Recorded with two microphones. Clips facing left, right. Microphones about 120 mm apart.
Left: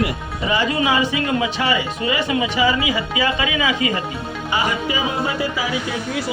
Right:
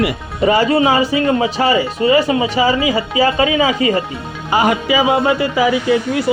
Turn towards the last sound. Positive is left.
turn(degrees=-60)  # may be behind; listen again after turning